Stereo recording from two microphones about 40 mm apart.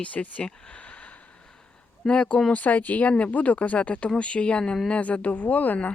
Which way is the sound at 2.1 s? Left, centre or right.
Left.